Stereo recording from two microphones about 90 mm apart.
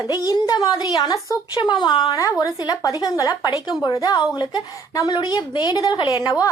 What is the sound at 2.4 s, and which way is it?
A woman's voice, 45° left (ahead or behind).